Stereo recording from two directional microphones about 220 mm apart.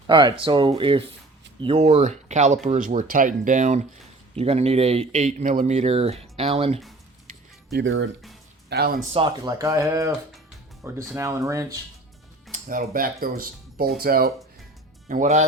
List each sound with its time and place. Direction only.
0.1 s speech: 20° right (ahead or behind)
7.7 s speech: 55° right (ahead or behind)
8.7 s speech: 45° right (ahead or behind)
9.1 s speech: 20° right (ahead or behind)
12.6 s speech: 40° right (ahead or behind)